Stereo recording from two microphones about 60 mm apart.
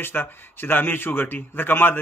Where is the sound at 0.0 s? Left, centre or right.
Left.